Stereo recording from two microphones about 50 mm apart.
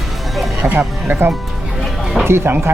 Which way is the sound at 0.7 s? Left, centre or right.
Right.